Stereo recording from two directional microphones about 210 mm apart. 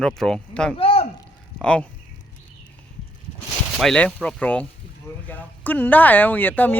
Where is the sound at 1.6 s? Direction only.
5° left (ahead or behind).